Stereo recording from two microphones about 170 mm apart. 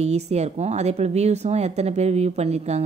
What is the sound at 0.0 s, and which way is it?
A woman's voice, 40° right (ahead or behind).